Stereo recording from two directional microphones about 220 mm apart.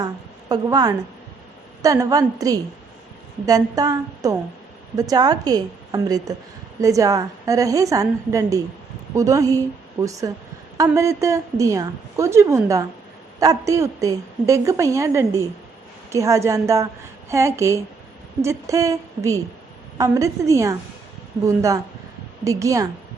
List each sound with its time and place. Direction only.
0.0 s a woman's voice: 20° right (ahead or behind)